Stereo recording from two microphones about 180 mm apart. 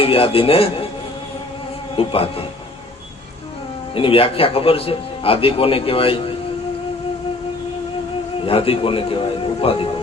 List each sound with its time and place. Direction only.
0.0 s a man's voice: 30° left (ahead or behind)
2.0 s a man's voice: 30° left (ahead or behind)
3.9 s a man's voice: 30° left (ahead or behind)
8.4 s a man's voice: 30° left (ahead or behind)